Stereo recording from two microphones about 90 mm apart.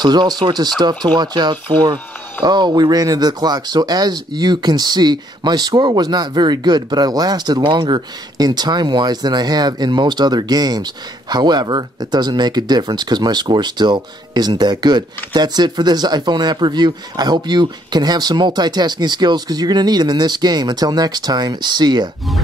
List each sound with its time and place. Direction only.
0.0 s speech: 50° right (ahead or behind)